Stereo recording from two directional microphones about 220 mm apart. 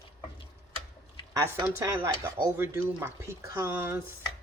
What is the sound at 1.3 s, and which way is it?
Speech, 15° right (ahead or behind).